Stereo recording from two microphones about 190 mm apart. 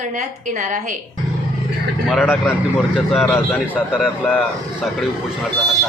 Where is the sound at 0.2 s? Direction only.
40° right (ahead or behind).